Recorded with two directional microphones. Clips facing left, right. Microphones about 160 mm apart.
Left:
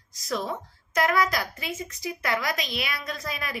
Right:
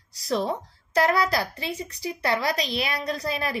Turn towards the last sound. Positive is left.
turn(degrees=-35)  # may be behind; listen again after turning